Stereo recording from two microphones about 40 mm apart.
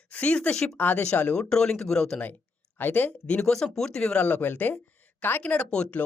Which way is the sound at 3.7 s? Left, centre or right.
Centre.